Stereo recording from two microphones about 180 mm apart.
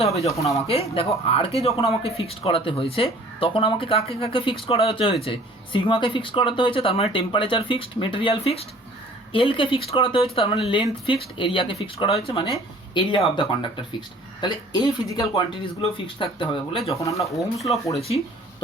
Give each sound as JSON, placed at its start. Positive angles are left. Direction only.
{"t": 0.0, "sound": "speech", "side_deg": 35}
{"t": 17.0, "sound": "speech", "side_deg": 15}
{"t": 17.3, "sound": "speech", "side_deg": 0}